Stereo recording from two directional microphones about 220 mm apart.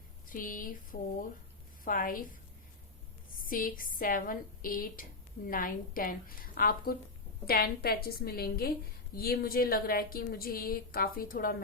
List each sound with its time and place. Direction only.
0.3 s a woman's voice: 40° left (ahead or behind)
3.4 s a woman's voice: 40° left (ahead or behind)